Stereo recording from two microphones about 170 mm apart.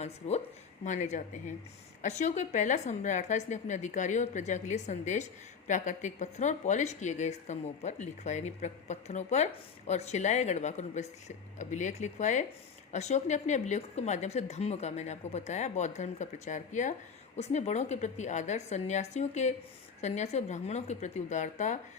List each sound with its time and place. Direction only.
0.0 s a woman's voice: 40° left (ahead or behind)